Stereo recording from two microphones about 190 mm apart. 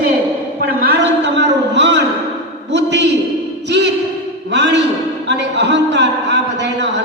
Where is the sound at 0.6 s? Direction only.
60° right (ahead or behind).